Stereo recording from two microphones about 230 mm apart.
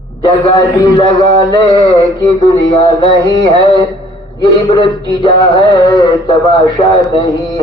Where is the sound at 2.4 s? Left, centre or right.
Centre.